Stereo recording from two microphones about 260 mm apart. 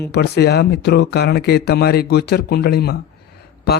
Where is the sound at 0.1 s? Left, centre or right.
Left.